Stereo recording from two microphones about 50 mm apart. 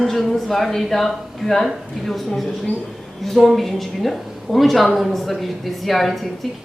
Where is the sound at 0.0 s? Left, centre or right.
Centre.